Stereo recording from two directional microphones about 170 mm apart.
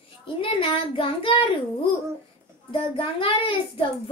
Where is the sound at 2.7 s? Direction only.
30° left (ahead or behind).